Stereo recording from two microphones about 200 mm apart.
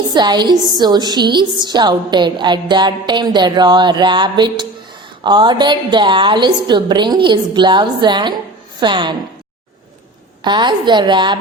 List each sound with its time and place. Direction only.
0.1 s a woman's voice: 20° right (ahead or behind)
10.4 s a woman's voice: 20° right (ahead or behind)